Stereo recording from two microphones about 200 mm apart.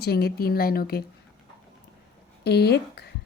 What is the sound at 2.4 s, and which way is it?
Speech, 55° left (ahead or behind).